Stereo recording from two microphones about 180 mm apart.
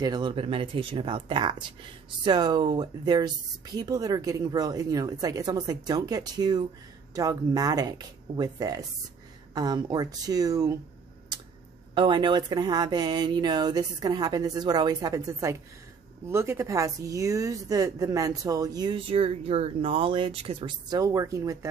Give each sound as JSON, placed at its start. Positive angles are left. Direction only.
{"t": 0.0, "sound": "speech", "side_deg": -25}
{"t": 11.9, "sound": "speech", "side_deg": -25}